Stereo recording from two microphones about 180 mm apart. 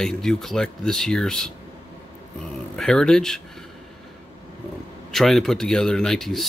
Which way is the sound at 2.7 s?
5° left (ahead or behind).